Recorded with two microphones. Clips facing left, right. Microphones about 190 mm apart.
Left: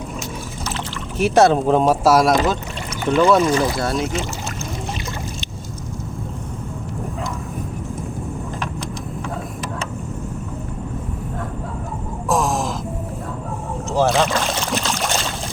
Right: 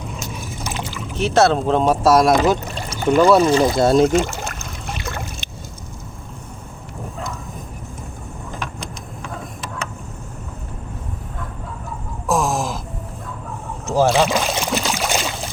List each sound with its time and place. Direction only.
1.2 s speech: 10° left (ahead or behind)
2.9 s speech: 40° right (ahead or behind)
3.4 s speech: 30° right (ahead or behind)
4.1 s boat: 50° right (ahead or behind)
12.3 s a sound: centre (ahead or behind)
13.9 s boat: 5° right (ahead or behind)